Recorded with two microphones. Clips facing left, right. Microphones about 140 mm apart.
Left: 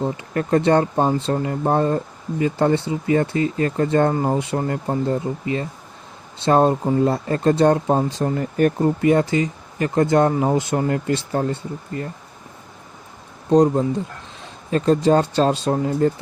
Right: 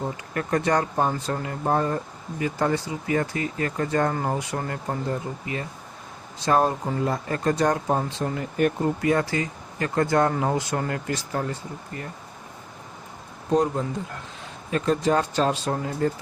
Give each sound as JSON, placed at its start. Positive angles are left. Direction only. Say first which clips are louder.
{"t": 0.0, "sound": "speech", "louder": "left 6 dB", "side_deg": 25}
{"t": 6.4, "sound": "speech", "louder": "left 5 dB", "side_deg": 30}
{"t": 8.1, "sound": "speech", "louder": "left 6 dB", "side_deg": 40}
{"t": 9.0, "sound": "speech", "louder": "left 6 dB", "side_deg": 25}
{"t": 13.5, "sound": "speech", "louder": "left 7 dB", "side_deg": 35}